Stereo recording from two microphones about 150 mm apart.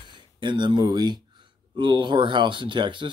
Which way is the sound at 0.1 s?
30° right (ahead or behind).